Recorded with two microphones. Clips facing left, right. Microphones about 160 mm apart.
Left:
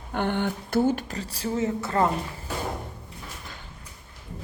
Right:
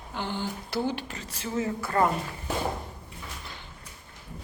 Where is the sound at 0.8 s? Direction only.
45° left (ahead or behind); by 2.0 s 25° left (ahead or behind).